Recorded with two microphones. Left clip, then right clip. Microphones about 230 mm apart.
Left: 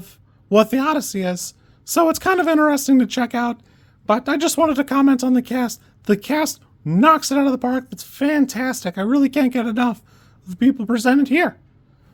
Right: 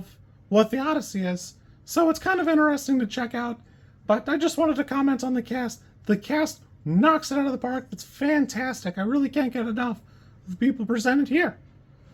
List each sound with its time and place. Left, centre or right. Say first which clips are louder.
0.0 s speech: left 3 dB; left